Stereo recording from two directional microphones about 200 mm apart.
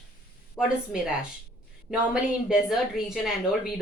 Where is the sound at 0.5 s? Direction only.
5° right (ahead or behind).